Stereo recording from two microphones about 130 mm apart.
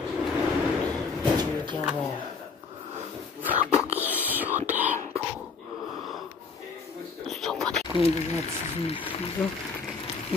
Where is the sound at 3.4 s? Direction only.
15° right (ahead or behind).